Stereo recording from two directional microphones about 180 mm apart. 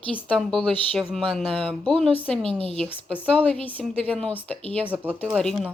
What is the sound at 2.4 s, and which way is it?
Speech, 30° right (ahead or behind).